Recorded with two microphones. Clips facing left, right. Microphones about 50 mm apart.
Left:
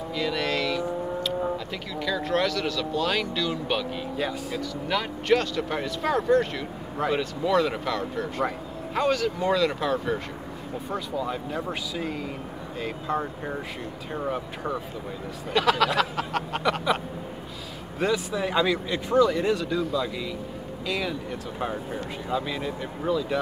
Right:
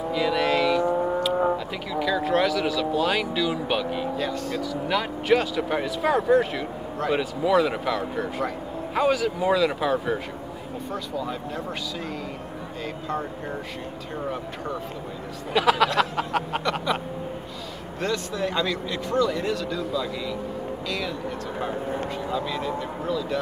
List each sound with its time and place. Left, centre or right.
0.1 s vehicle: centre
0.8 s vehicle: right
1.3 s foghorn: right
2.0 s speech: centre
4.2 s speech: centre
4.6 s speech: centre
10.9 s speech: centre
15.5 s speech: centre
18.0 s speech: centre